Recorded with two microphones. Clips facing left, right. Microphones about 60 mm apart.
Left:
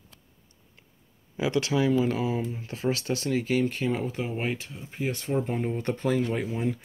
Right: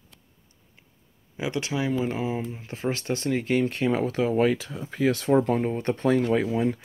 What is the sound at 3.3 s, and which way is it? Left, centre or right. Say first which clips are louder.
Speech: right 1 dB; right.